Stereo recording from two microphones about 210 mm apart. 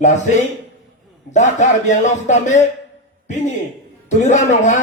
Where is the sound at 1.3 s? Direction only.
35° left (ahead or behind).